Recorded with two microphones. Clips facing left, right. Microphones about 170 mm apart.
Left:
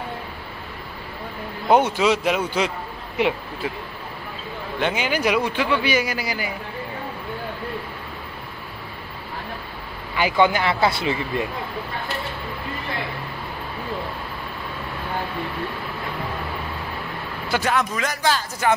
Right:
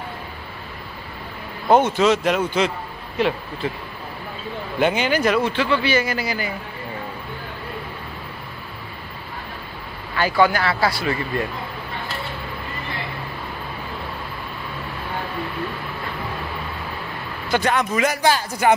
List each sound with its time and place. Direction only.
1.7 s speech: 10° left (ahead or behind)
4.7 s speech: 5° right (ahead or behind)
5.0 s speech: 10° left (ahead or behind)
10.1 s speech: 15° left (ahead or behind)
17.5 s speech: 5° left (ahead or behind)
17.9 s speech: 10° right (ahead or behind)